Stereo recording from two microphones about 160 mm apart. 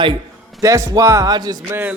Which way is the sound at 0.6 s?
20° right (ahead or behind).